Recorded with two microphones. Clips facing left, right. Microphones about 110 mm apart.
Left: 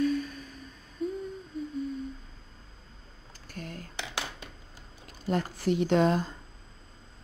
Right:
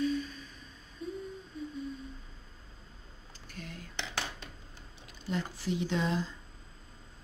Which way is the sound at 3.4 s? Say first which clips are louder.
Left 5 dB; 45° left (ahead or behind).